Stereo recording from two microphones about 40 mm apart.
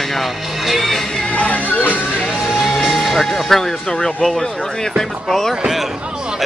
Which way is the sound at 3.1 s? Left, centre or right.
Centre.